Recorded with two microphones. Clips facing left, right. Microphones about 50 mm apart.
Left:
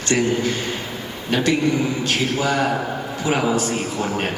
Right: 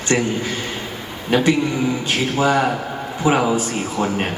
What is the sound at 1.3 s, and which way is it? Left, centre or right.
A man's voice, centre.